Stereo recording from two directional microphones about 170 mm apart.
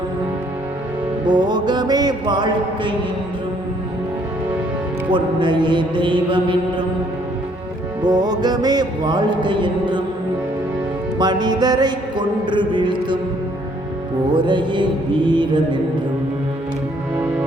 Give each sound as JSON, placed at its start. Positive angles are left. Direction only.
{"t": 1.2, "sound": "music", "side_deg": -25}
{"t": 5.0, "sound": "music", "side_deg": -30}
{"t": 8.0, "sound": "music", "side_deg": -25}
{"t": 11.2, "sound": "music", "side_deg": -25}
{"t": 14.3, "sound": "music", "side_deg": -25}